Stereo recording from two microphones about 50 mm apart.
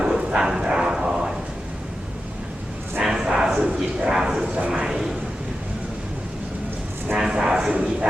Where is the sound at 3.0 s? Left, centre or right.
Centre.